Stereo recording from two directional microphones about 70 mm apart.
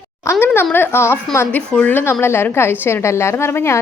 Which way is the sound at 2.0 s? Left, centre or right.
Left.